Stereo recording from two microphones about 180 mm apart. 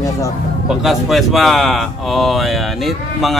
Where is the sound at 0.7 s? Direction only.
Centre (ahead or behind).